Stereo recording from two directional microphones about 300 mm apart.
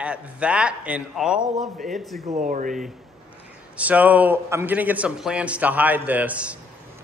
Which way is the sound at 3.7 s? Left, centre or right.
Centre.